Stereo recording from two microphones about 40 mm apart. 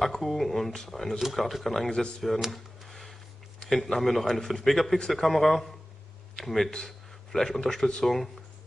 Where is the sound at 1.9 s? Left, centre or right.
Left.